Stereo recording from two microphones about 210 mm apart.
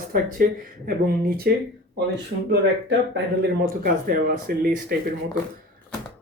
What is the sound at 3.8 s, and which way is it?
Speech, 45° right (ahead or behind).